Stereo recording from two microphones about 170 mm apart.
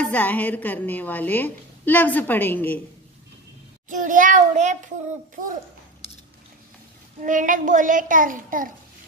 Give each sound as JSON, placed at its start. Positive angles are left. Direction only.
{"t": 0.0, "sound": "a woman's voice", "side_deg": 10}
{"t": 3.9, "sound": "a child's voice", "side_deg": -50}
{"t": 7.2, "sound": "a child's voice", "side_deg": -50}